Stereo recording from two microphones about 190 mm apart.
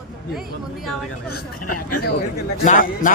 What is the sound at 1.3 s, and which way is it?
Speech, 50° left (ahead or behind).